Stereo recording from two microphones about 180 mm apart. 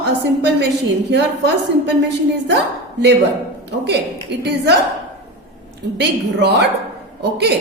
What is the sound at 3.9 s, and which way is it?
Speech, 70° right (ahead or behind).